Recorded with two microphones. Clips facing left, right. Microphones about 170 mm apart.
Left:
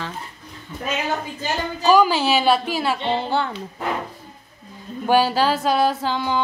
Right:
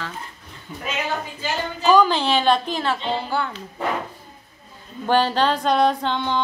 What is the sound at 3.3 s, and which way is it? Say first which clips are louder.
Speech: left 2 dB; 30° left (ahead or behind).